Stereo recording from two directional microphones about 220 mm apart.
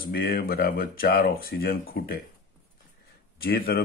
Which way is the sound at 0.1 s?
45° left (ahead or behind).